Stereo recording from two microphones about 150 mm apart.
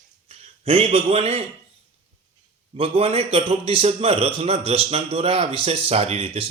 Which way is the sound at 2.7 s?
40° right (ahead or behind).